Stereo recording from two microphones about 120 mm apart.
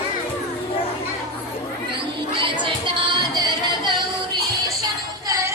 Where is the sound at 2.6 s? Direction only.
40° right (ahead or behind).